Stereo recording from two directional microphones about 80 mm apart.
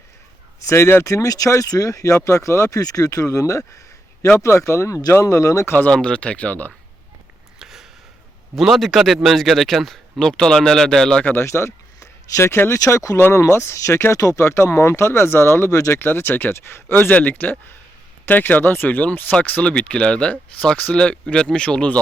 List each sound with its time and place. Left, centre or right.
0.7 s speech: left
5.9 s speech: centre
7.6 s a sound: centre
8.5 s speech: centre
11.3 s speech: left
12.8 s speech: left
16.0 s speech: left